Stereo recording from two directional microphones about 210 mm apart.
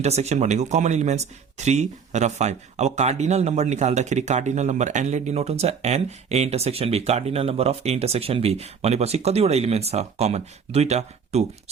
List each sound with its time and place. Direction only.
0.0 s speech: 30° right (ahead or behind)